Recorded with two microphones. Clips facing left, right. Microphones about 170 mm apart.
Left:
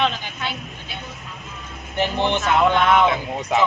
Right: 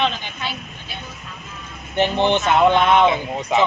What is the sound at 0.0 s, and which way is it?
Speech, centre (ahead or behind).